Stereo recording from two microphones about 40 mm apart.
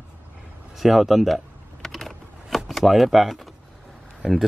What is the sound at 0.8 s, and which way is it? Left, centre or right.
Typing, centre.